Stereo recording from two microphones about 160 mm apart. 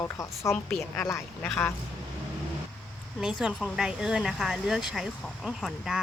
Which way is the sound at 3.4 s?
Centre (ahead or behind).